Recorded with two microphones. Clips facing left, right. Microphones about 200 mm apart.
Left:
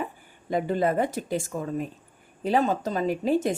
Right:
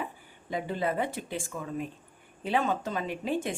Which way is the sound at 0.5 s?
45° left (ahead or behind).